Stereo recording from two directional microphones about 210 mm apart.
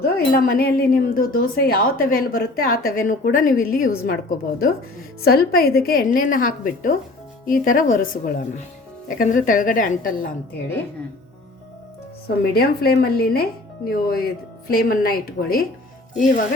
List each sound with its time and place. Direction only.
0.0 s a woman's voice: 45° left (ahead or behind)
12.5 s a woman's voice: 50° left (ahead or behind)